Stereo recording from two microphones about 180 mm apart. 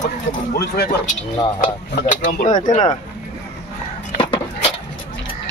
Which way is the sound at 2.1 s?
45° left (ahead or behind).